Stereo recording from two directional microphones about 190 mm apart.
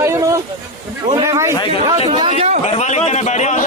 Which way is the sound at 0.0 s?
15° right (ahead or behind).